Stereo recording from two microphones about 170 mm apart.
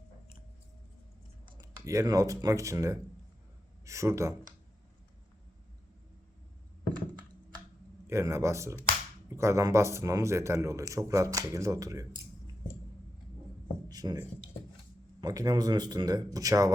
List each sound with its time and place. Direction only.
1.5 s a man's voice: 20° right (ahead or behind)
8.0 s a man's voice: 15° right (ahead or behind)
13.8 s a sound: 25° right (ahead or behind)
15.2 s speech: 20° right (ahead or behind)